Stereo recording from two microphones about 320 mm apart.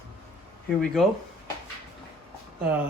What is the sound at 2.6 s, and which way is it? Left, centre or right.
Speech, centre.